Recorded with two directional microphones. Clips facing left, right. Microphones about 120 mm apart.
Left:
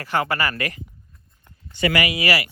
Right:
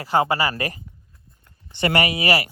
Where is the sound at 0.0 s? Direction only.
20° right (ahead or behind).